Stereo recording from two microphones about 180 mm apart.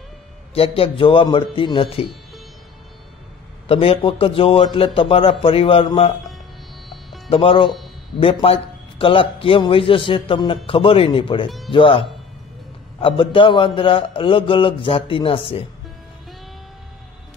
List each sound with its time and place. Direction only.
0.6 s a man's voice: 30° left (ahead or behind)
3.6 s a man's voice: 30° left (ahead or behind)
7.2 s a man's voice: 30° left (ahead or behind)